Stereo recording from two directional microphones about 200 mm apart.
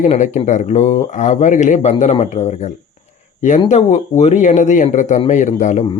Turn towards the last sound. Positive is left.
turn(degrees=35)  # may be behind; listen again after turning